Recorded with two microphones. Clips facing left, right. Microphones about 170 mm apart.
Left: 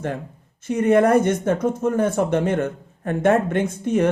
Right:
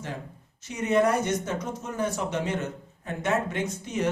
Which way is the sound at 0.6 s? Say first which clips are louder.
Left 7 dB; 55° left (ahead or behind).